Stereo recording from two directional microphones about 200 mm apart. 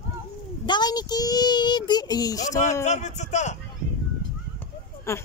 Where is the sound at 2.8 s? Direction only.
35° left (ahead or behind).